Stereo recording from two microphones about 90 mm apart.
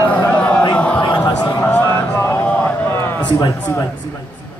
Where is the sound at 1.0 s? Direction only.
60° left (ahead or behind).